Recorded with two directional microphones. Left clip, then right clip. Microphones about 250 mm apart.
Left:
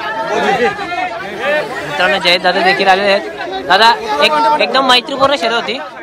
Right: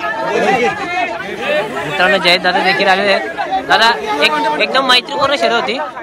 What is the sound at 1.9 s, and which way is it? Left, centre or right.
Speech, centre.